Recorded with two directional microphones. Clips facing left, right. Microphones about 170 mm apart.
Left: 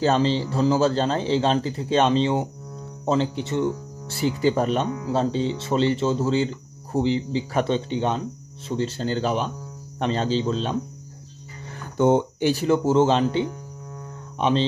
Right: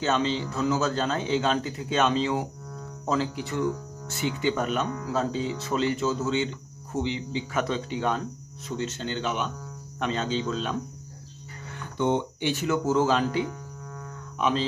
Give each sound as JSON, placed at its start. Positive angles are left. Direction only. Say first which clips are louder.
{"t": 0.0, "sound": "speech", "louder": "left 5 dB", "side_deg": 35}
{"t": 11.7, "sound": "speech", "louder": "left 6 dB", "side_deg": 45}